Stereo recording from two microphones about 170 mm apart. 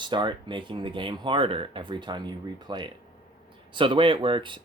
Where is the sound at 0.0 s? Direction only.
25° right (ahead or behind).